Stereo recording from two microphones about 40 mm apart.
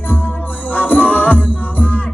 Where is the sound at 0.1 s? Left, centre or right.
Left.